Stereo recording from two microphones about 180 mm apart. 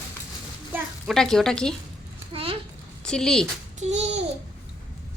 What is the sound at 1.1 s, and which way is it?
Speech, centre (ahead or behind).